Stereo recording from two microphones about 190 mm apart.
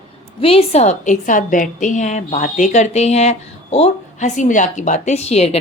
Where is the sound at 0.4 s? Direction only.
30° left (ahead or behind).